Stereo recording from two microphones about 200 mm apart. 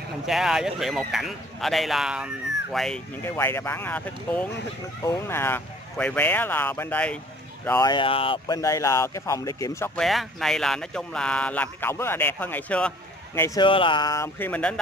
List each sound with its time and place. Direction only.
0.3 s a man's voice: centre (ahead or behind)
3.2 s speech: 10° left (ahead or behind)
7.9 s speech: 25° left (ahead or behind)
10.0 s speech: centre (ahead or behind)
13.7 s speech: 25° left (ahead or behind); by 14.8 s 5° left (ahead or behind)